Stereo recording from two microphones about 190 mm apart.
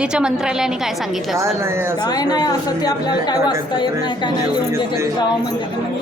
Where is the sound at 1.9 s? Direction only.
20° left (ahead or behind).